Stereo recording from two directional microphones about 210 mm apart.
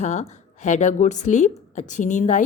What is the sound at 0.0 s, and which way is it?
Speech, 35° left (ahead or behind).